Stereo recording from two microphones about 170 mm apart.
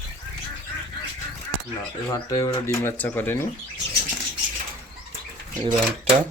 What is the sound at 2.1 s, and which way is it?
Speech, 20° left (ahead or behind).